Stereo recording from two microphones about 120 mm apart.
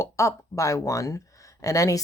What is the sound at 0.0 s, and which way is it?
Speech, 25° left (ahead or behind).